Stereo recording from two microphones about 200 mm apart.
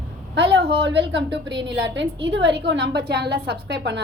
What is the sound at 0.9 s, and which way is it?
A woman's voice, 60° right (ahead or behind).